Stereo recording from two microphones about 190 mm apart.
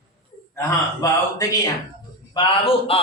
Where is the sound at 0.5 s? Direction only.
15° left (ahead or behind).